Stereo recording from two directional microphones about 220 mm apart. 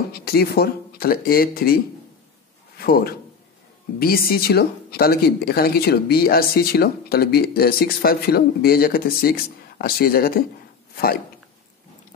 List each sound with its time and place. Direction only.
0.1 s speech: 45° left (ahead or behind)
2.8 s a man's voice: 40° left (ahead or behind)